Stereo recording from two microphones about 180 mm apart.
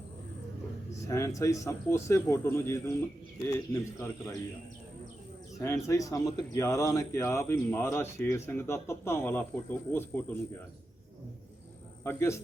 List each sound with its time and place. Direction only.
1.0 s speech: 15° left (ahead or behind)
5.5 s speech: 15° left (ahead or behind)
12.0 s speech: 15° left (ahead or behind)